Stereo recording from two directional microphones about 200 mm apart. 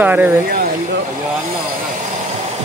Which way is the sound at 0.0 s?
10° right (ahead or behind).